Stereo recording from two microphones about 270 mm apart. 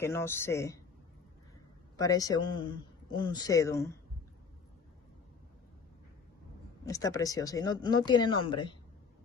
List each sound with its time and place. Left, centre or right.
0.0 s speech: centre
2.0 s speech: centre
6.9 s speech: centre